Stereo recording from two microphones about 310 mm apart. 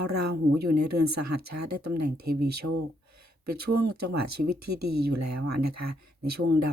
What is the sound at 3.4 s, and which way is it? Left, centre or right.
Speech, right.